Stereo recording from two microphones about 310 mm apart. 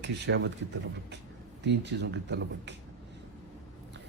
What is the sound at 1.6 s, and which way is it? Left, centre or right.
A man's voice, right.